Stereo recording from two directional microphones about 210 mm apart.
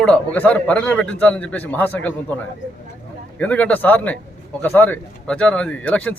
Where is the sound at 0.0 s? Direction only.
5° left (ahead or behind).